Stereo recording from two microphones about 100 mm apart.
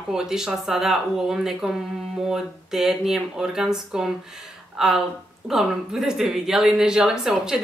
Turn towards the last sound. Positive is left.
turn(degrees=-5)  # may be behind; listen again after turning